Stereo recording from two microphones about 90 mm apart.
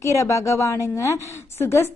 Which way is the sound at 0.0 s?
35° left (ahead or behind).